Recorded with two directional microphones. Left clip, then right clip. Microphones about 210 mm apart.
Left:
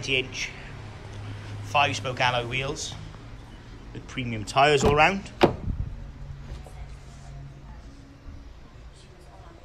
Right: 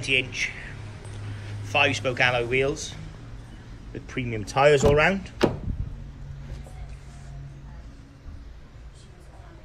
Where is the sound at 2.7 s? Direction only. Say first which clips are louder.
Right 2 dB; 65° left (ahead or behind).